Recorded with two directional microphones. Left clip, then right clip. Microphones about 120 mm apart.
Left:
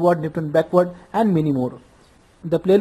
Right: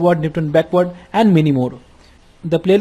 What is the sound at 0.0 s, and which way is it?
Speech, centre (ahead or behind).